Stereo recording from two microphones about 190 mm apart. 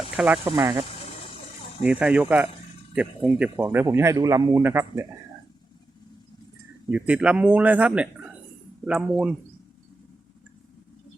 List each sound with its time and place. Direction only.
0.2 s speech: 5° right (ahead or behind)
0.5 s speech: 20° right (ahead or behind)
1.8 s a man's voice: 5° right (ahead or behind)
6.9 s a man's voice: 5° right (ahead or behind)